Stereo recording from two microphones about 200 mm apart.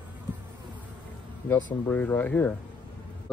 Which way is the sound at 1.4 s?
10° left (ahead or behind).